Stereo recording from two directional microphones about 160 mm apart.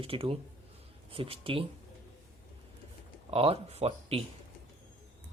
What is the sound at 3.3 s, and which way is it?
Speech, 35° right (ahead or behind).